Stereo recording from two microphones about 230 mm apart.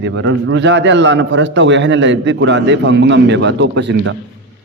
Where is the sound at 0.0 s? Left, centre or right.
Right.